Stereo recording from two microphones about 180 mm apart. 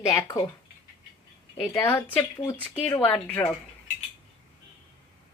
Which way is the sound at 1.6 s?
10° left (ahead or behind).